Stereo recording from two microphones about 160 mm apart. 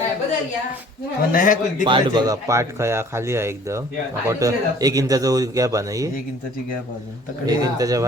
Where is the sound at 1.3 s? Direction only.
55° left (ahead or behind).